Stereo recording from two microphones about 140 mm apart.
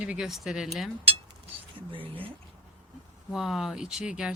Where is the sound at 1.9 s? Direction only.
40° right (ahead or behind).